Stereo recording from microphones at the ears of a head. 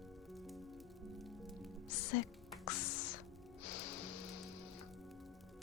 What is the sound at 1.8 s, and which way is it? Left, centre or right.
Music, left.